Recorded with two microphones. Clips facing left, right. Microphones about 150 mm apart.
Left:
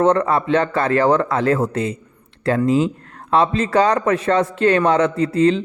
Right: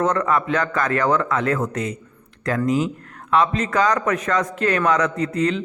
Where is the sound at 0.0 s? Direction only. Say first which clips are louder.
Left 4 dB; 30° left (ahead or behind).